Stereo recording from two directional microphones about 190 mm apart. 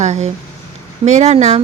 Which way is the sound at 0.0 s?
35° right (ahead or behind).